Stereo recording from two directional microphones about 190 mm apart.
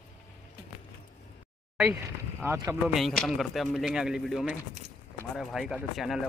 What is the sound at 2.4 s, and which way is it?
Speech, 20° right (ahead or behind).